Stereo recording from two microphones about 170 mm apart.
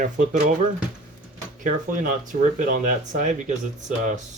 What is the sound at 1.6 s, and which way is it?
Speech, 50° right (ahead or behind).